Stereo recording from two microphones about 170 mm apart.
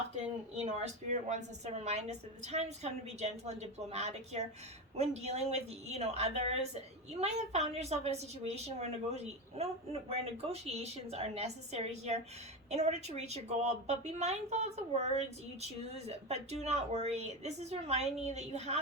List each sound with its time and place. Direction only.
0.5 s a woman's voice: 40° right (ahead or behind)